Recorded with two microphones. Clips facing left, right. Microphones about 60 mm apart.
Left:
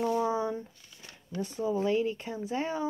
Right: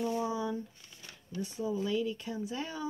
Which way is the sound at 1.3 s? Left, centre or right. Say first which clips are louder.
Left 4 dB; left.